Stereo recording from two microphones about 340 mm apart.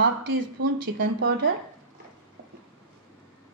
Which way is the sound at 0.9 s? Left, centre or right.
Right.